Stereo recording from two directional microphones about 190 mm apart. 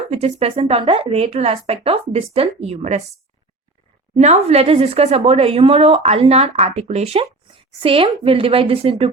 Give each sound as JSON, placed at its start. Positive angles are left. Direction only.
{"t": 0.1, "sound": "a woman's voice", "side_deg": -35}
{"t": 4.2, "sound": "a woman's voice", "side_deg": -35}